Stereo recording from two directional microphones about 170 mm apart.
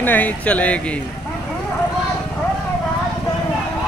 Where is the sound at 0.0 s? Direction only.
10° left (ahead or behind).